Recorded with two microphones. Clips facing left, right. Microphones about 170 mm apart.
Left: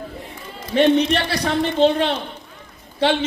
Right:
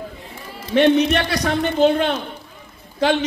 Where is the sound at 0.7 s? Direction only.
35° left (ahead or behind).